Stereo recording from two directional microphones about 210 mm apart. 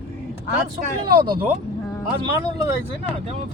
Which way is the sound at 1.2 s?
20° right (ahead or behind).